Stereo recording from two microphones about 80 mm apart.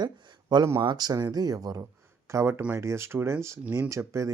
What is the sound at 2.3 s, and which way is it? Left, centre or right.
Speech, right.